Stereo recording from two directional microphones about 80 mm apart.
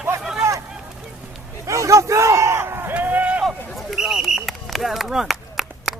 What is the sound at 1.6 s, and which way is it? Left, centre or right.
A man's voice, right.